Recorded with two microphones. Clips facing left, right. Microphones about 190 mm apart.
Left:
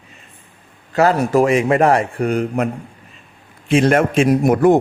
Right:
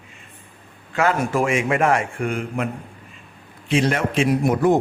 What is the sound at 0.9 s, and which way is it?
A man's voice, 35° left (ahead or behind).